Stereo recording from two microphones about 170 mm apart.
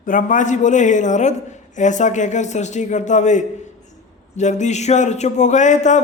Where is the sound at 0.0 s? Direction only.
50° left (ahead or behind).